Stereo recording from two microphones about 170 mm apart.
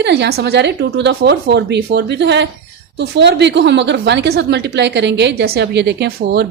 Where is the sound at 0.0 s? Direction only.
85° right.